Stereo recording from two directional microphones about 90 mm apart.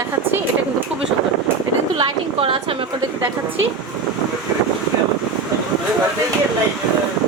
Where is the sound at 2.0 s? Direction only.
70° right (ahead or behind).